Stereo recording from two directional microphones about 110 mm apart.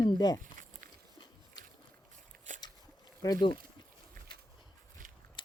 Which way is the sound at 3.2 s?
35° left (ahead or behind).